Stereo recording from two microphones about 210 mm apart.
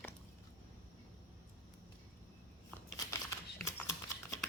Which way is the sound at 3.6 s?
15° left (ahead or behind).